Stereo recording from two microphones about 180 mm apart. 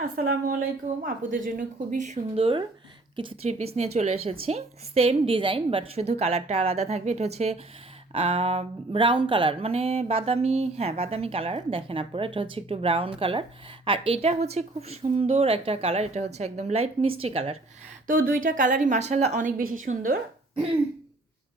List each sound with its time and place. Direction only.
0.0 s a woman's voice: 55° right (ahead or behind); by 17.6 s 35° right (ahead or behind)
18.0 s a woman's voice: 50° right (ahead or behind)